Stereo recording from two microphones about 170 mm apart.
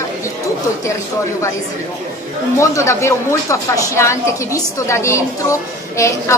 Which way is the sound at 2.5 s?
15° left (ahead or behind).